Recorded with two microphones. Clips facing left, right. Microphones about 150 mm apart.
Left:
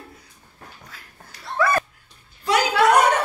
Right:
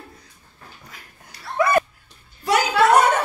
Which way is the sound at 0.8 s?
15° right (ahead or behind).